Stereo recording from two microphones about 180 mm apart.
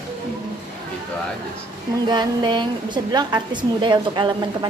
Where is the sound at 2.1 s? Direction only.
25° right (ahead or behind).